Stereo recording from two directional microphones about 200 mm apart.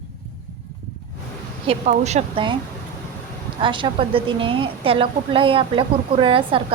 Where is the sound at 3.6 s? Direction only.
25° right (ahead or behind).